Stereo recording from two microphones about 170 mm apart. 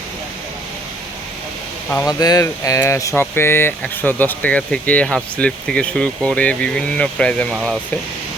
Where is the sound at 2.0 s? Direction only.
20° left (ahead or behind).